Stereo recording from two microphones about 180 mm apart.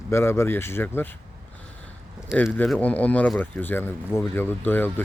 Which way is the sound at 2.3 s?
10° left (ahead or behind).